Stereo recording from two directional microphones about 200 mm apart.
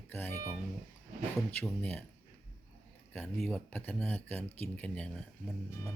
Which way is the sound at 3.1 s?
5° left (ahead or behind).